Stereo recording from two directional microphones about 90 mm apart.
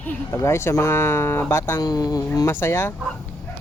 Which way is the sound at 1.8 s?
45° left (ahead or behind).